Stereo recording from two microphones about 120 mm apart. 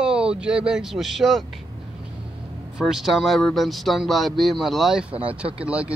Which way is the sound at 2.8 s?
Centre (ahead or behind).